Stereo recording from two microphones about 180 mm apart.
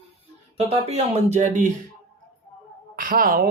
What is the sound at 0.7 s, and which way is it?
Speech, 35° right (ahead or behind).